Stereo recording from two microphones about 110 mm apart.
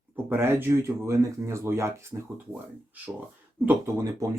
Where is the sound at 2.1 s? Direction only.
15° right (ahead or behind).